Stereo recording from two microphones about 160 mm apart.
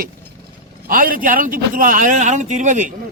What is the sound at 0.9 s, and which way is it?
A man's voice, 60° right (ahead or behind).